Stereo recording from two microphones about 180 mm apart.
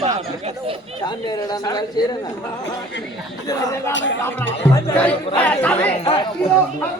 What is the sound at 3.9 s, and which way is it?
Speech, 90° left.